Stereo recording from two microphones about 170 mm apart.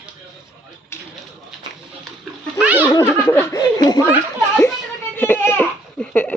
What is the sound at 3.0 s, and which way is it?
Snicker, 10° left (ahead or behind).